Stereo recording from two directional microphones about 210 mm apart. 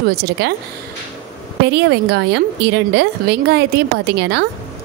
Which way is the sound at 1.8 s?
55° right (ahead or behind).